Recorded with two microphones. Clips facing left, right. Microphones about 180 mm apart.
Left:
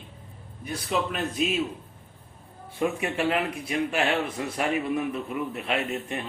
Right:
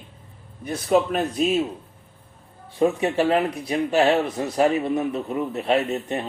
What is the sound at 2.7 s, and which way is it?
Speech, 35° right (ahead or behind).